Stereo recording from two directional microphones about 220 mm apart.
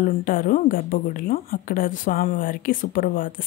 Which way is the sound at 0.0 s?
40° left (ahead or behind).